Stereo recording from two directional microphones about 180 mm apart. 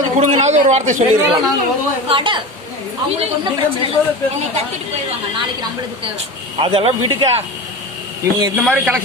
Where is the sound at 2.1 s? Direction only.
30° right (ahead or behind).